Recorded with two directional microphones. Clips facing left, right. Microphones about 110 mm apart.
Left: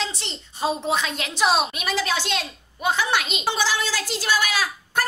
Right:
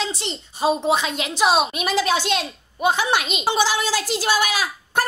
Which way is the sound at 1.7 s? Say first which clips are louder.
Right 4 dB; 20° right (ahead or behind).